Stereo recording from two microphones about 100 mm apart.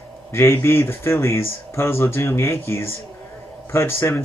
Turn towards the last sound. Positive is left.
turn(degrees=25)  # may be behind; listen again after turning